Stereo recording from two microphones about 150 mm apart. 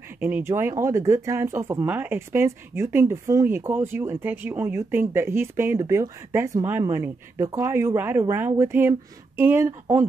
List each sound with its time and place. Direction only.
0.2 s speech: 15° right (ahead or behind)